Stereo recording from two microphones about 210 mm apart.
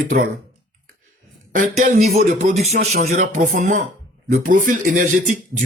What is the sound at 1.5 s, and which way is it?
Speech, 35° right (ahead or behind).